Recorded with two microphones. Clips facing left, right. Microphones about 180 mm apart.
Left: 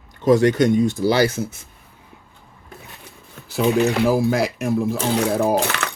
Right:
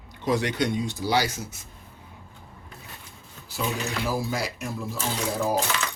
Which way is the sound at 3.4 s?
65° left (ahead or behind).